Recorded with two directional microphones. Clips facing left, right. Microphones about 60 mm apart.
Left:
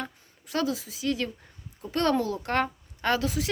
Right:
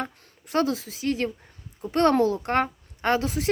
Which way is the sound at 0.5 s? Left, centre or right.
Right.